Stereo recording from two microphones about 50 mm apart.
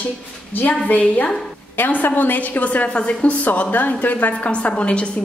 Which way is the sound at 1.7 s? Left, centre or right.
Left.